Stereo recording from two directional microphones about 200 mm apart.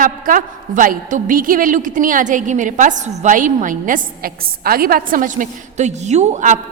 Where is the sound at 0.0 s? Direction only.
45° right (ahead or behind).